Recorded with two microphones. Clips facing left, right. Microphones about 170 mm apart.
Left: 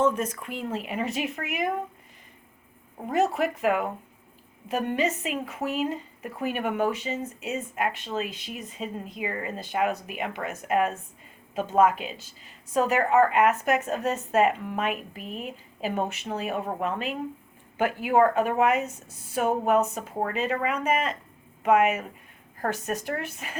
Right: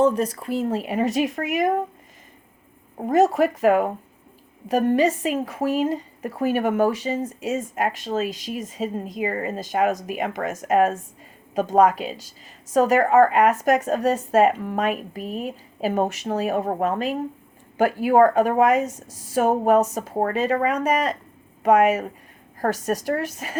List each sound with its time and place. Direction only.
0.0 s speech: 35° right (ahead or behind)
3.1 s a woman's voice: 40° right (ahead or behind)